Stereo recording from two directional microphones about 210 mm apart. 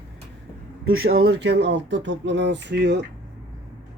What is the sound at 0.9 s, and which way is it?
Speech, 75° right (ahead or behind).